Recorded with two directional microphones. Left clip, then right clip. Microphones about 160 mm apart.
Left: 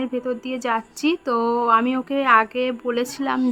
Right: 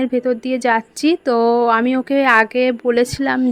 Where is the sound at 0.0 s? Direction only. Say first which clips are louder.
Right 7 dB; 30° right (ahead or behind).